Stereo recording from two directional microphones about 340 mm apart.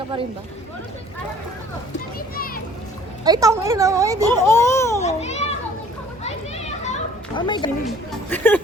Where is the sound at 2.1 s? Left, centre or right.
Left.